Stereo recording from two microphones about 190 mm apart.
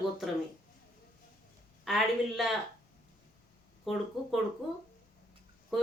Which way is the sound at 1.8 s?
Centre (ahead or behind).